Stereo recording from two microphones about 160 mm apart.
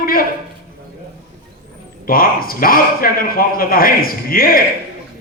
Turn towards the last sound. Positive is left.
turn(degrees=65)  # may be behind; listen again after turning